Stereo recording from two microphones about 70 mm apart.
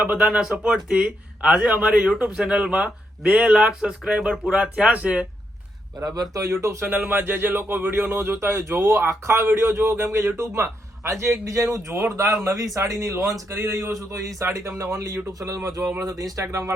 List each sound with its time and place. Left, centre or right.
0.0 s speech: right
0.3 s speech: centre
6.1 s speech: right
6.8 s speech: right
13.5 s speech: right